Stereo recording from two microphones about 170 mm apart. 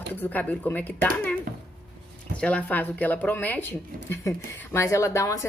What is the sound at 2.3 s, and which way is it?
A woman's voice, 5° left (ahead or behind).